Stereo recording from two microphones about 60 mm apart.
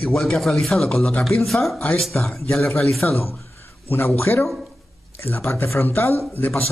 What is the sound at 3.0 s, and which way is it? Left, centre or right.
Speech, left.